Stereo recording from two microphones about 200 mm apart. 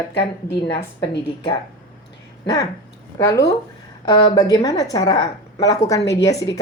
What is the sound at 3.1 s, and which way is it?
A woman's voice, 15° left (ahead or behind).